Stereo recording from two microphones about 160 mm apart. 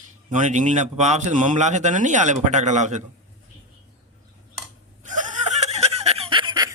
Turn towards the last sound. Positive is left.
turn(degrees=-30)  # may be behind; listen again after turning